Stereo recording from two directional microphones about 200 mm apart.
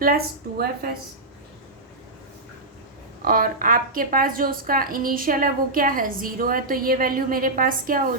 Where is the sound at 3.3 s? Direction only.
45° right (ahead or behind).